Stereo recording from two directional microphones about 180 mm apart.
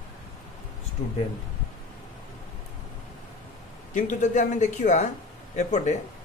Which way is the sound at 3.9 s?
45° left (ahead or behind).